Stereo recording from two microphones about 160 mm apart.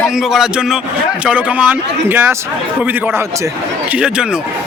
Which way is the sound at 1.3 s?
10° right (ahead or behind).